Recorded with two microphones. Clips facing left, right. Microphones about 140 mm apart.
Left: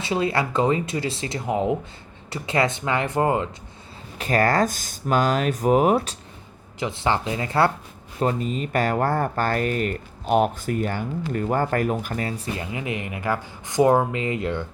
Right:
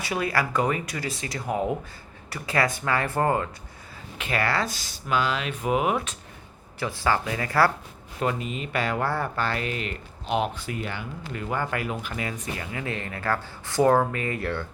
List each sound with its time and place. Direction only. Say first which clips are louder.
0.0 s speech: left 3 dB; 25° left (ahead or behind)
4.2 s speech: left 6 dB; 40° left (ahead or behind)
6.7 s speech: left 2 dB; 20° left (ahead or behind)
8.2 s speech: left 4 dB; 35° left (ahead or behind)
12.7 s speech: left 3 dB; 15° left (ahead or behind)